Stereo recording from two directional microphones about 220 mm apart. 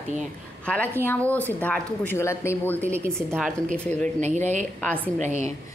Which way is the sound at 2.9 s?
10° right (ahead or behind).